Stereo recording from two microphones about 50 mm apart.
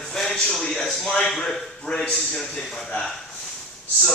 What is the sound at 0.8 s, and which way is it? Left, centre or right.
Speech, centre.